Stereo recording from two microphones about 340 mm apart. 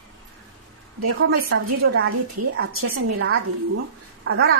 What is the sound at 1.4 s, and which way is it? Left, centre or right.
A woman's voice, right.